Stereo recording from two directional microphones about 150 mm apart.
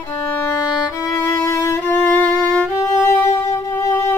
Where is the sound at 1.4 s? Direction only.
20° left (ahead or behind).